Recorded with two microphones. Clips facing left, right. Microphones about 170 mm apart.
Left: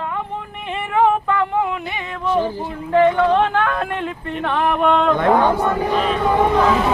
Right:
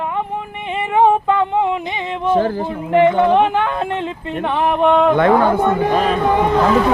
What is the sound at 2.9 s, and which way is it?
Speech, 20° right (ahead or behind).